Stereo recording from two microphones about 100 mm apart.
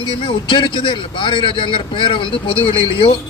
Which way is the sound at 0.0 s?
60° left (ahead or behind).